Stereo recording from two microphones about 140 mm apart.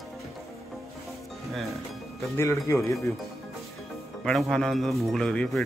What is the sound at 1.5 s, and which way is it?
Speech, centre (ahead or behind).